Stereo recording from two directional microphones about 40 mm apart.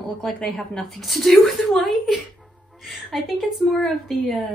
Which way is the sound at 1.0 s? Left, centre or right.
Centre.